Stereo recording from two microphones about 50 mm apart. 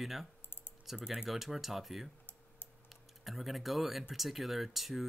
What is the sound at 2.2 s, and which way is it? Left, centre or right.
Typing, left.